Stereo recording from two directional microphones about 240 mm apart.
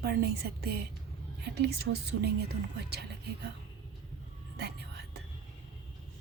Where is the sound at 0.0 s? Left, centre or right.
Right.